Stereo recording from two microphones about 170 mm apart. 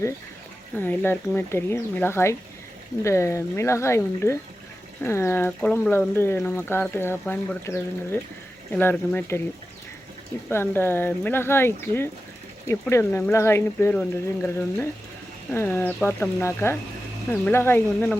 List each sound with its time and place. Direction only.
0.8 s speech: 10° left (ahead or behind)
10.5 s speech: 15° left (ahead or behind)